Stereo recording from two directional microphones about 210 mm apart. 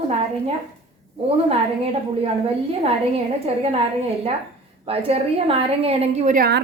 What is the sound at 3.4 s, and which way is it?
Speech, 30° right (ahead or behind).